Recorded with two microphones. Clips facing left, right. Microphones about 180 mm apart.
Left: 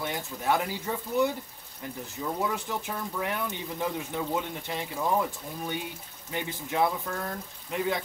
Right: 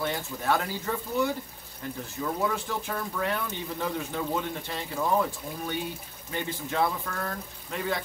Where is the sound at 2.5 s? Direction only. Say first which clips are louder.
Right 1 dB; 15° left (ahead or behind).